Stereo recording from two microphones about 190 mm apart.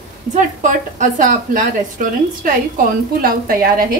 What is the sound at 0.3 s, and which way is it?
A woman's voice, 40° right (ahead or behind).